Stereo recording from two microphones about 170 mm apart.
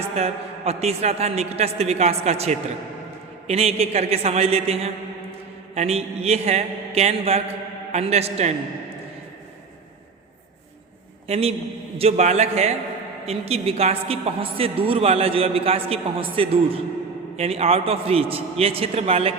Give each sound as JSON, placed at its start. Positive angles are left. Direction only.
{"t": 0.2, "sound": "a man's voice", "side_deg": -40}
{"t": 11.3, "sound": "a man's voice", "side_deg": -35}